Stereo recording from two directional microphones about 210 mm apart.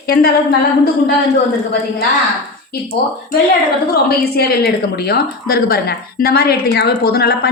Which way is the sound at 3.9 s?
50° left (ahead or behind).